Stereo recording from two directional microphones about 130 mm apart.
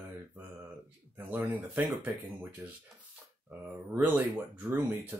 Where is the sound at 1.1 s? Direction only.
15° right (ahead or behind).